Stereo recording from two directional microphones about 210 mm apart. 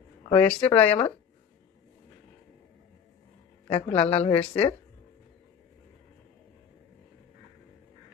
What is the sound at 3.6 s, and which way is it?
Speech, 25° left (ahead or behind).